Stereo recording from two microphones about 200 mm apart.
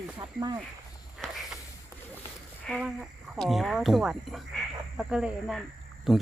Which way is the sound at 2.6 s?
Centre (ahead or behind).